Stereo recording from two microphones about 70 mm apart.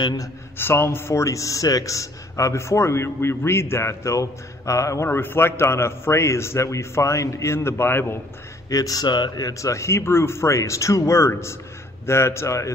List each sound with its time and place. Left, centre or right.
0.6 s a man's voice: left
5.0 s a man's voice: left
8.6 s speech: left
9.5 s a man's voice: left